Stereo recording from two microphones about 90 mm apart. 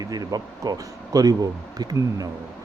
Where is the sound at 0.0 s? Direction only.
45° right (ahead or behind).